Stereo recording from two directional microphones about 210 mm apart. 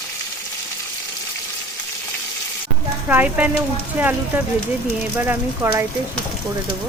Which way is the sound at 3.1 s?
10° right (ahead or behind).